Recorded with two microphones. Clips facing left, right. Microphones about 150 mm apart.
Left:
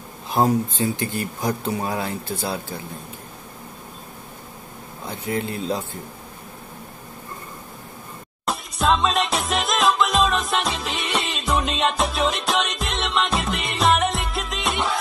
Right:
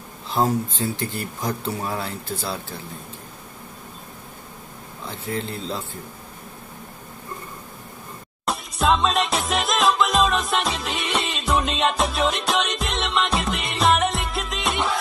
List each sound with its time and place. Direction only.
0.3 s speech: 15° left (ahead or behind)
5.0 s speech: 15° left (ahead or behind)
8.5 s music: centre (ahead or behind)